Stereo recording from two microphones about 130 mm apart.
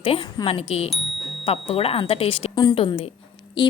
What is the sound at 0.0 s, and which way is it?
A woman's voice, 45° left (ahead or behind).